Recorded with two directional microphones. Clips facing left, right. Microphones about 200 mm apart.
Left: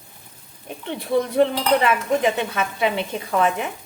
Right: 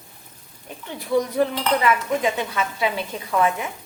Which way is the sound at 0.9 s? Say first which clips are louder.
Left 2 dB; 30° left (ahead or behind).